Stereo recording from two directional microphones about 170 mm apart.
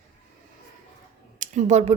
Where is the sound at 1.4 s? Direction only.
45° right (ahead or behind).